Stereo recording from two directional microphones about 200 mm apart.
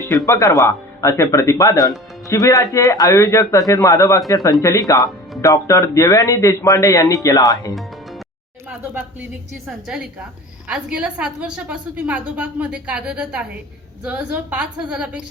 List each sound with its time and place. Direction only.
0.3 s speech: 15° left (ahead or behind)
9.6 s a woman's voice: 5° right (ahead or behind)